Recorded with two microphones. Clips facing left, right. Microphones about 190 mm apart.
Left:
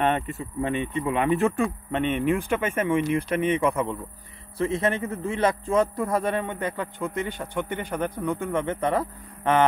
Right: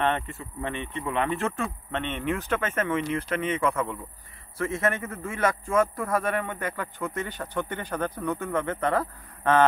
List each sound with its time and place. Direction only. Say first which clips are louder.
0.0 s a man's voice: left 3 dB; 15° left (ahead or behind)